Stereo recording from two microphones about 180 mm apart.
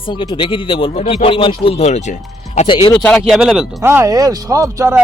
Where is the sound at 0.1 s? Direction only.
25° left (ahead or behind).